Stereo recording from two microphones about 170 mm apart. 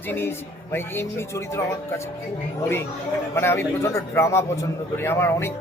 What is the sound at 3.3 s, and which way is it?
A man's voice, 15° left (ahead or behind).